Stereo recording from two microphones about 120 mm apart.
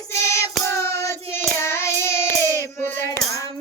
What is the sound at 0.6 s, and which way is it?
Child singing, 25° left (ahead or behind).